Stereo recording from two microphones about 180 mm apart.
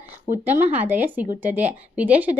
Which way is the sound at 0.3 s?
10° right (ahead or behind).